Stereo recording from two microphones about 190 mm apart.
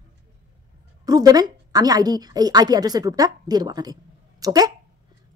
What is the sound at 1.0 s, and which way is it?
A woman's voice, 20° right (ahead or behind).